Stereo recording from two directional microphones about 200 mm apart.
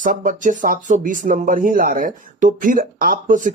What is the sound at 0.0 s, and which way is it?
Speech, 40° right (ahead or behind).